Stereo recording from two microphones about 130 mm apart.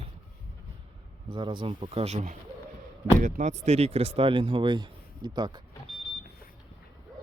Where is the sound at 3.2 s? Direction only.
75° right (ahead or behind); by 5.6 s 35° right (ahead or behind).